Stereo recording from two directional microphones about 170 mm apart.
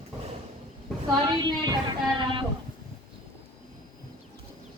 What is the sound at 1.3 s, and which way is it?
Speech, 25° right (ahead or behind).